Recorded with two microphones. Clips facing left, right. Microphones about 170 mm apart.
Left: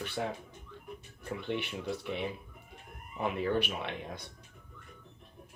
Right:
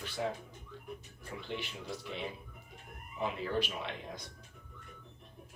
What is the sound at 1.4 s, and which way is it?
A man's voice, 60° left (ahead or behind).